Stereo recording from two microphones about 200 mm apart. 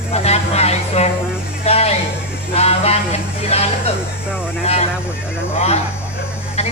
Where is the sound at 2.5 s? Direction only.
30° left (ahead or behind).